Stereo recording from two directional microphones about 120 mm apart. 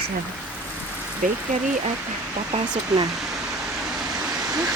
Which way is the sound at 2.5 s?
40° right (ahead or behind).